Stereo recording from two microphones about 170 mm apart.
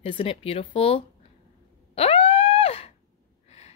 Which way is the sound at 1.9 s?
35° left (ahead or behind).